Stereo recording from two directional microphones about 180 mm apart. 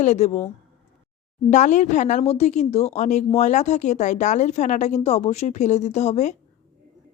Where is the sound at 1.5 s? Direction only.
40° left (ahead or behind).